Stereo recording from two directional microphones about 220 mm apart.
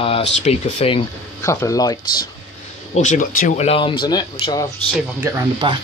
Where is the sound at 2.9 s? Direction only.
35° left (ahead or behind).